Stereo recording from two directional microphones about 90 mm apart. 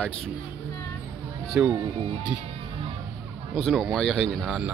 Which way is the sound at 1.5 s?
15° right (ahead or behind).